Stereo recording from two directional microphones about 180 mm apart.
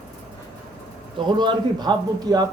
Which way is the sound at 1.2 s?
25° right (ahead or behind).